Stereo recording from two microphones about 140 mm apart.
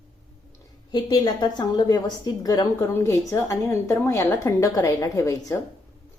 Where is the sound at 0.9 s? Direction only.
30° left (ahead or behind).